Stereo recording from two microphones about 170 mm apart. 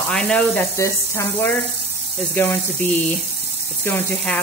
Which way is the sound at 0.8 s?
15° left (ahead or behind).